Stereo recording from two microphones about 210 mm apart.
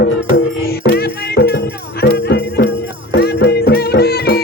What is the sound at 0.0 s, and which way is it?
Music, 50° left (ahead or behind).